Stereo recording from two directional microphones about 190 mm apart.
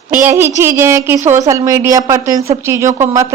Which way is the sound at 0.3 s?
10° right (ahead or behind).